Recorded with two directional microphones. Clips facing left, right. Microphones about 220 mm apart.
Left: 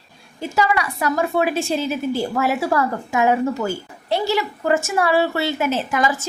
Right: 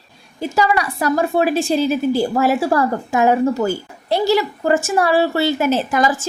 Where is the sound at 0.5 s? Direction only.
35° right (ahead or behind).